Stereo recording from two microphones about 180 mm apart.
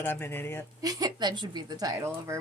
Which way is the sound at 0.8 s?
20° right (ahead or behind).